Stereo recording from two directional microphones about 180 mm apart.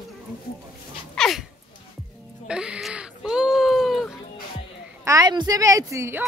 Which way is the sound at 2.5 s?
5° right (ahead or behind).